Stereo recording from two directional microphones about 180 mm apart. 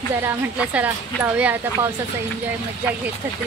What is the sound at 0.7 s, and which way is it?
Speech, 10° right (ahead or behind).